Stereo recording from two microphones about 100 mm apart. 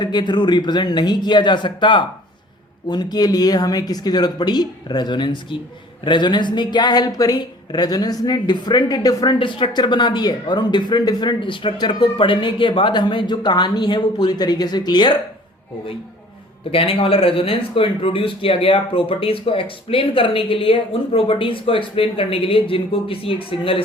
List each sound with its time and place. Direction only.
0.0 s speech: 45° left (ahead or behind)
9.4 s speech: 55° left (ahead or behind)
16.7 s speech: 70° left (ahead or behind)